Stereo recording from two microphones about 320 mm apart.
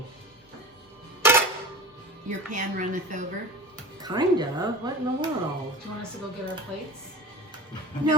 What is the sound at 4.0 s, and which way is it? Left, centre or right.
Speech, centre.